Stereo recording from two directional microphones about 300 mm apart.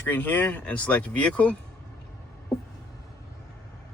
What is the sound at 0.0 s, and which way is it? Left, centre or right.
Speech, centre.